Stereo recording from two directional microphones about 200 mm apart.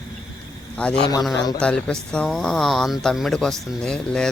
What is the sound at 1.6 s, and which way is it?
Speech, 5° left (ahead or behind).